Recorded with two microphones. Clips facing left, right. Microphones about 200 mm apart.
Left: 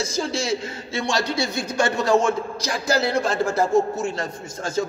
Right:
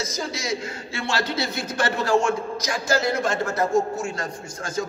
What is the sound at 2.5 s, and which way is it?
A man's voice, 35° left (ahead or behind).